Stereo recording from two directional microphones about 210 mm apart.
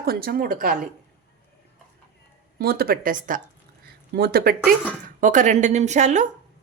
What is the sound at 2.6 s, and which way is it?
A woman's voice, 45° right (ahead or behind).